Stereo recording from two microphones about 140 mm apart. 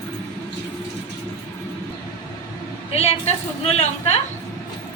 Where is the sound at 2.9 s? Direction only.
45° left (ahead or behind).